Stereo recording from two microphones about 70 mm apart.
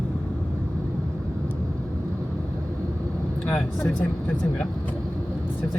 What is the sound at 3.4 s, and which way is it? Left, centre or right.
Speech, centre.